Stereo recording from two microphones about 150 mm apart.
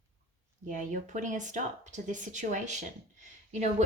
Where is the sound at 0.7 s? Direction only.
60° right (ahead or behind).